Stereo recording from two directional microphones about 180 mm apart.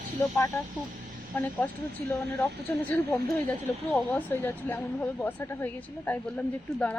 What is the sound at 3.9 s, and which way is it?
A woman's voice, 10° left (ahead or behind).